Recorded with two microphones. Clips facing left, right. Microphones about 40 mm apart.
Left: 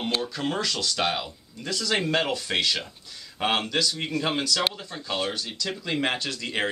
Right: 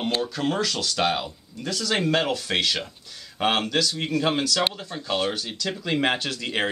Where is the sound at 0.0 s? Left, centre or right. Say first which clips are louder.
Right 3 dB; centre.